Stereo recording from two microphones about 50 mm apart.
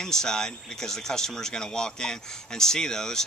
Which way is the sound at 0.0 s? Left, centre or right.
Centre.